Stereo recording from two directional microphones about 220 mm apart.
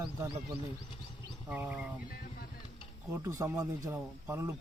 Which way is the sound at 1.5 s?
5° right (ahead or behind).